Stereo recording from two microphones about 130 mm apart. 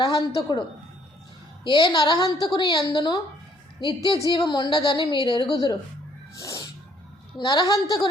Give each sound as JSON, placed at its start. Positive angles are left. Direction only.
{"t": 0.0, "sound": "a woman's voice", "side_deg": 40}
{"t": 1.6, "sound": "a woman's voice", "side_deg": 40}
{"t": 6.4, "sound": "music", "side_deg": 25}
{"t": 7.3, "sound": "a woman's voice", "side_deg": 35}